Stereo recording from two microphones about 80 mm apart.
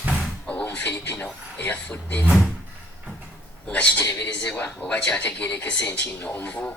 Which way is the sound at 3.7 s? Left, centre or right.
Centre.